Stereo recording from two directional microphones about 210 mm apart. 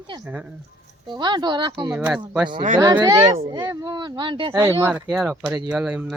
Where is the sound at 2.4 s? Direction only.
25° right (ahead or behind).